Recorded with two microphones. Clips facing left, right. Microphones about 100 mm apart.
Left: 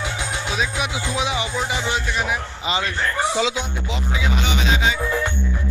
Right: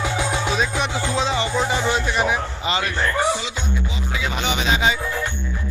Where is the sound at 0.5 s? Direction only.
5° left (ahead or behind).